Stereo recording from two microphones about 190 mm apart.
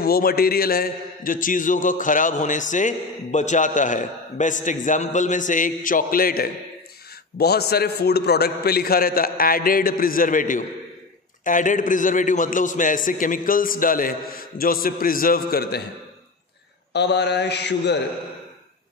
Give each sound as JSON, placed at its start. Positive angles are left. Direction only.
{"t": 0.0, "sound": "a man's voice", "side_deg": 50}
{"t": 16.9, "sound": "mantra", "side_deg": 60}